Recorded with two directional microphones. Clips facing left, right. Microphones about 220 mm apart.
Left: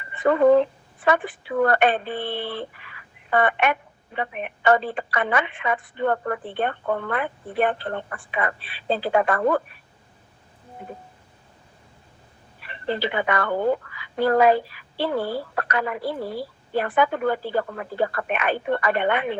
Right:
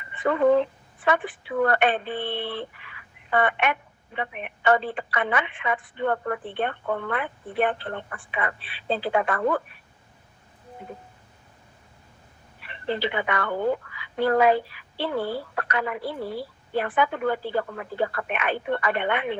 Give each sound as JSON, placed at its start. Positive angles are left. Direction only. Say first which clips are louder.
{"t": 0.2, "sound": "speech", "louder": "left 4 dB", "side_deg": 40}
{"t": 12.6, "sound": "speech", "louder": "left 1 dB", "side_deg": 40}